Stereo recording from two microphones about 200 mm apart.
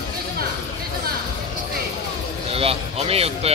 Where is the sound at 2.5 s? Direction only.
30° right (ahead or behind).